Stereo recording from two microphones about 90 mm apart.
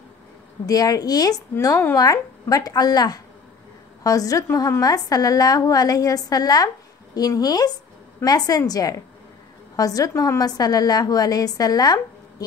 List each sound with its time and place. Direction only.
0.7 s a woman's voice: 45° left (ahead or behind)